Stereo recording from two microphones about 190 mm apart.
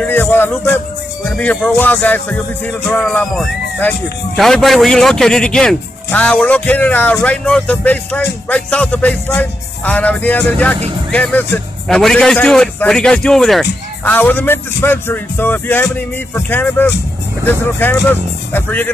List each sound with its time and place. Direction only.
0.0 s music: 10° left (ahead or behind)
1.3 s a man's voice: 5° left (ahead or behind)